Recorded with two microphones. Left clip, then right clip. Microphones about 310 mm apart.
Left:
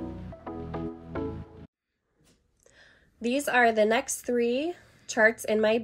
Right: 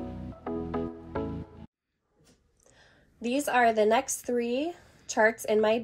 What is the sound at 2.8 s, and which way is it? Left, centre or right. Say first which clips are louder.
A woman's voice: left 3 dB; left.